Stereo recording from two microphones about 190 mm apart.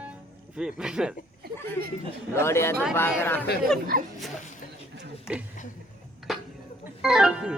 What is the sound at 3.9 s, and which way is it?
Speech, 50° right (ahead or behind).